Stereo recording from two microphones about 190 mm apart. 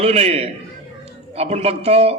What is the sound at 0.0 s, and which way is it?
A man's voice, 35° right (ahead or behind).